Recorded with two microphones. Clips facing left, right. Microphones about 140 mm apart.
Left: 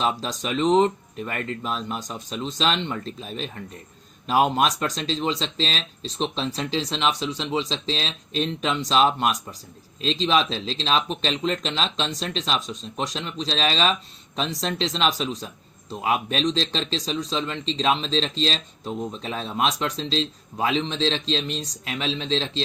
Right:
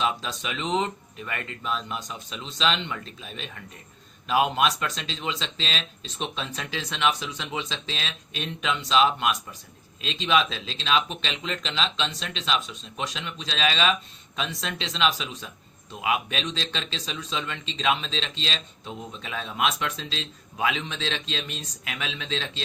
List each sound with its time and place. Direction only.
0.0 s speech: 40° left (ahead or behind)